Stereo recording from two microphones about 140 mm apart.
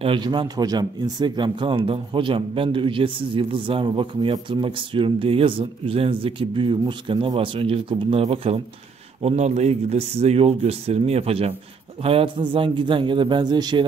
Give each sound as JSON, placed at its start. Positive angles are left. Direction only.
{"t": 0.0, "sound": "speech", "side_deg": -35}